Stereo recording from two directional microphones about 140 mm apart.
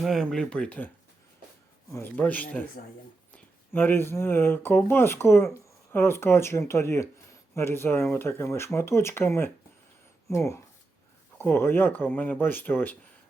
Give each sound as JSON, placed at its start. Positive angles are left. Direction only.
{"t": 0.0, "sound": "speech", "side_deg": 0}
{"t": 1.9, "sound": "speech", "side_deg": 15}